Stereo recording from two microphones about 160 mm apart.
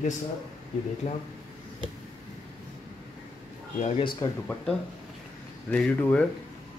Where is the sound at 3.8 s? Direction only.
45° left (ahead or behind).